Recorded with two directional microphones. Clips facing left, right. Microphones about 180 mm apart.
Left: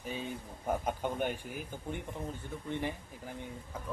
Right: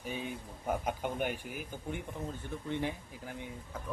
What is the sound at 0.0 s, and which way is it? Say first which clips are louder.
Speech: even; 10° right (ahead or behind).